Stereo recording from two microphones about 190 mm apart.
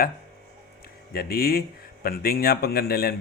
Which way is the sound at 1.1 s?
55° left (ahead or behind).